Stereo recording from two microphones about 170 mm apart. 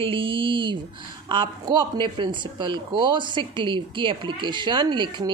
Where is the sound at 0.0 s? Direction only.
30° right (ahead or behind).